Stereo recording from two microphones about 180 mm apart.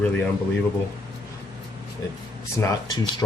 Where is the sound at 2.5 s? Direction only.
15° left (ahead or behind).